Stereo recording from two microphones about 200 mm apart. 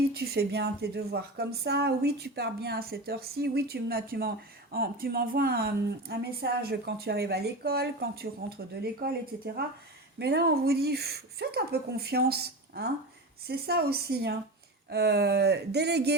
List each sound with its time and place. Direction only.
0.0 s a woman's voice: 50° right (ahead or behind)